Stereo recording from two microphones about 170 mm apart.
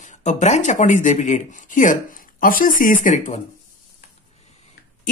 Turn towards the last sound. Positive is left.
turn(degrees=50)  # may be behind; listen again after turning